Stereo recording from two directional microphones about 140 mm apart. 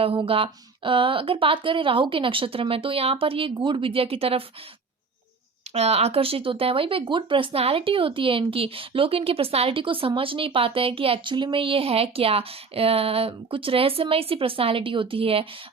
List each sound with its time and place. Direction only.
0.0 s speech: 40° right (ahead or behind)
5.7 s speech: 50° right (ahead or behind)